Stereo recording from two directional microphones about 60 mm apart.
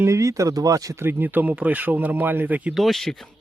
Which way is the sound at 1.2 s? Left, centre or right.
Right.